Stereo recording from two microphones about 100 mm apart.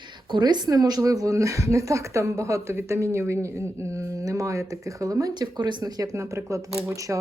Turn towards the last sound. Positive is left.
turn(degrees=-30)  # may be behind; listen again after turning